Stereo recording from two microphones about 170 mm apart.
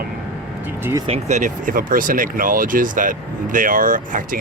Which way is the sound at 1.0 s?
40° right (ahead or behind).